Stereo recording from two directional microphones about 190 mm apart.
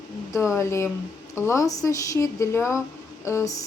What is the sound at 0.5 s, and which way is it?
Speech, 15° left (ahead or behind).